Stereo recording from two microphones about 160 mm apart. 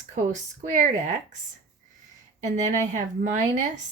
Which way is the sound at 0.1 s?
50° right (ahead or behind).